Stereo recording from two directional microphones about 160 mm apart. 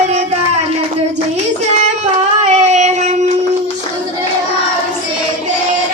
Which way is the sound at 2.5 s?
45° right (ahead or behind).